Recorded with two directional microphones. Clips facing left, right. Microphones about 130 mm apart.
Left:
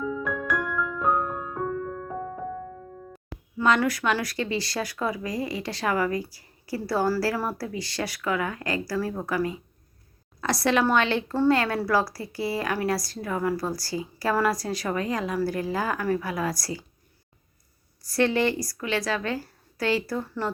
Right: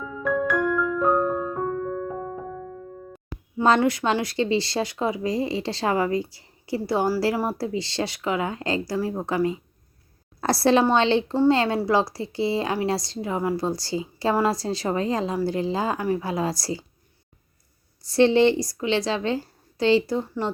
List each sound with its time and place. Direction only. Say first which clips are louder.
0.2 s music: right 5 dB; centre (ahead or behind)
3.6 s speech: right 3 dB; 25° right (ahead or behind)
18.0 s speech: right 6 dB; 25° right (ahead or behind)